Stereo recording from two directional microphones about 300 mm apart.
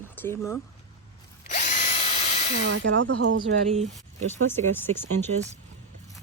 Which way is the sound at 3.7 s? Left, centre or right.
Right.